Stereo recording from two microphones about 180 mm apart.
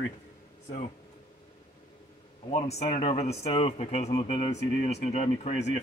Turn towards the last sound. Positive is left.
turn(degrees=40)  # may be behind; listen again after turning